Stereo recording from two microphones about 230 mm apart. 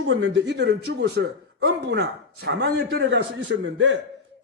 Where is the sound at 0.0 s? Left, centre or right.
Right.